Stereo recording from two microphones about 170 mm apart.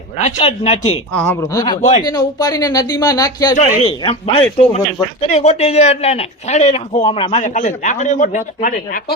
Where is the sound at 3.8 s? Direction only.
35° left (ahead or behind).